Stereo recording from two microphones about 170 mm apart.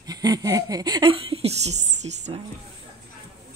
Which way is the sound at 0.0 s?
20° right (ahead or behind).